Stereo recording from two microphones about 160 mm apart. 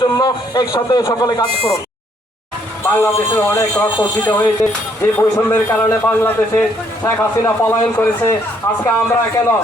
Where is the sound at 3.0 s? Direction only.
15° left (ahead or behind).